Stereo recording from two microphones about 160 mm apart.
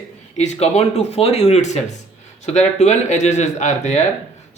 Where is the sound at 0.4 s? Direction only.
45° left (ahead or behind).